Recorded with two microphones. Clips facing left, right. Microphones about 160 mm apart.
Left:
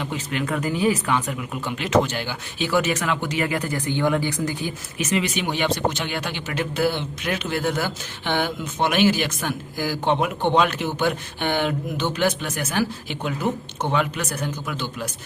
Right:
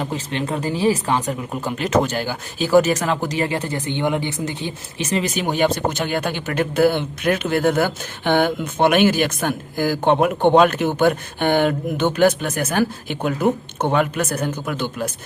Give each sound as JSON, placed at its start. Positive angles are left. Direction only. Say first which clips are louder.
{"t": 0.0, "sound": "speech", "louder": "right 2 dB", "side_deg": -35}